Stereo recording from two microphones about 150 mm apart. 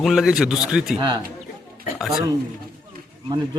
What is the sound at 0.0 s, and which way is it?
Speech, 5° right (ahead or behind).